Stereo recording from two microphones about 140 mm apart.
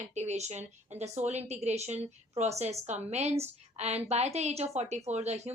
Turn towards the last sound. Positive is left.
turn(degrees=-50)  # may be behind; listen again after turning